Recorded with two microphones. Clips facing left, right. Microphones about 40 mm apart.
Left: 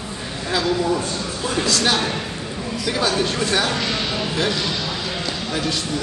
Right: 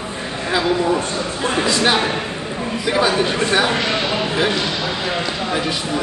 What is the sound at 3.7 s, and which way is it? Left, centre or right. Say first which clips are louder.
Basketball bounce: right 4 dB; right.